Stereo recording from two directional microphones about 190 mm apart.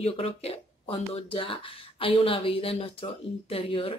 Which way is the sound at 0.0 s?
30° left (ahead or behind).